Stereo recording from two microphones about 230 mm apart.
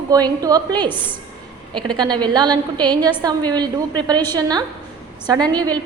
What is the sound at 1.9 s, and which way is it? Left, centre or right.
A woman's voice, centre.